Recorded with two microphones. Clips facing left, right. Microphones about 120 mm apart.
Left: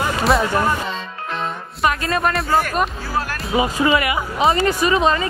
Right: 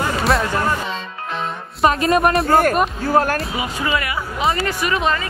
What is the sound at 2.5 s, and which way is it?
Speech, 45° right (ahead or behind).